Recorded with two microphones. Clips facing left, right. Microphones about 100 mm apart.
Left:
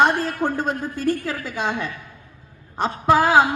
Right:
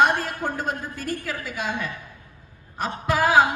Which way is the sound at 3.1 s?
25° left (ahead or behind).